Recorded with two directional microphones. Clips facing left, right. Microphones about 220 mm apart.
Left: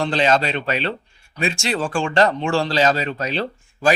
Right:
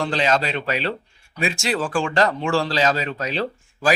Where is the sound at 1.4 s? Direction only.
5° right (ahead or behind).